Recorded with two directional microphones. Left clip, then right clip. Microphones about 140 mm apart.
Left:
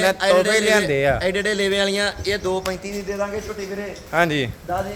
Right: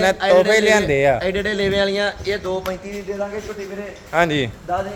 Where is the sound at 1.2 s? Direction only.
20° left (ahead or behind).